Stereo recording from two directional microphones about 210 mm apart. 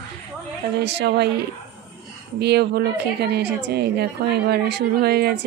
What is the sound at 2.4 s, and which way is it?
A woman's voice, 50° right (ahead or behind).